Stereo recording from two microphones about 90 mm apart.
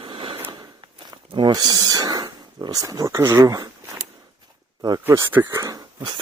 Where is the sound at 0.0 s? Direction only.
80° right.